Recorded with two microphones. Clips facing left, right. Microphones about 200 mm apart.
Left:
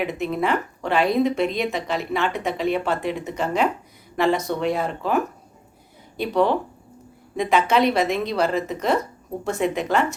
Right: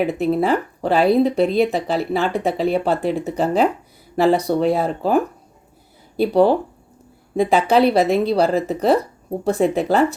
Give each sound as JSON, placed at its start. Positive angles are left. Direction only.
{"t": 0.0, "sound": "speech", "side_deg": -35}